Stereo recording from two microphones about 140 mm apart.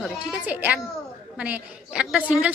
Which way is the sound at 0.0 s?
5° right (ahead or behind).